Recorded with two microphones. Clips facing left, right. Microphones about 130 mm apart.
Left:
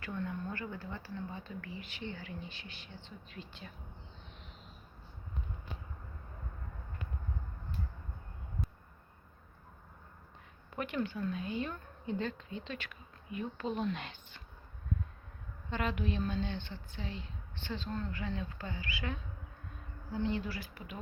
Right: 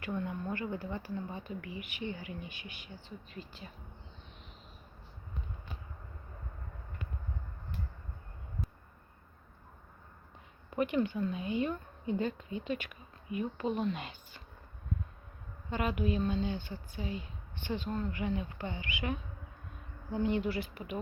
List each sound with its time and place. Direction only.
0.0 s speech: 15° right (ahead or behind)
11.2 s speech: 10° right (ahead or behind)
15.7 s speech: 10° right (ahead or behind)